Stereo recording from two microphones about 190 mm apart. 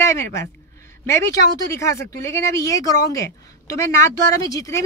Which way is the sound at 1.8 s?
15° left (ahead or behind).